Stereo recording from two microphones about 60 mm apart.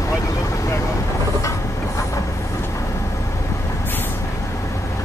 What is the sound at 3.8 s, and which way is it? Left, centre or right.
Vehicle, left.